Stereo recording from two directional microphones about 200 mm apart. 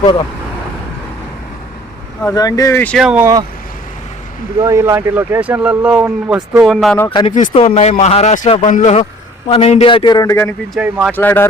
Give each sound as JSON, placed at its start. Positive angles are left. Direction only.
{"t": 2.2, "sound": "speech", "side_deg": 20}
{"t": 4.6, "sound": "speech", "side_deg": -15}
{"t": 7.1, "sound": "a man's voice", "side_deg": 25}
{"t": 10.8, "sound": "speech", "side_deg": -5}
{"t": 11.1, "sound": "speech", "side_deg": 10}